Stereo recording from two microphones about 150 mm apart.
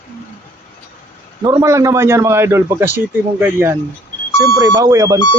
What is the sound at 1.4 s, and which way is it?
A man's voice, 20° right (ahead or behind).